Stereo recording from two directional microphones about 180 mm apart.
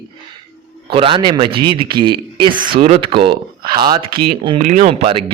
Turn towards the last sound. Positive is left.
turn(degrees=-30)  # may be behind; listen again after turning